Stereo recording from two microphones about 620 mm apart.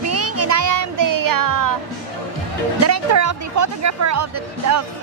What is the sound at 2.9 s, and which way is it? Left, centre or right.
Speech, right.